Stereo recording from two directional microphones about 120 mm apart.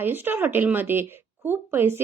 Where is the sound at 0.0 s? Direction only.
15° right (ahead or behind).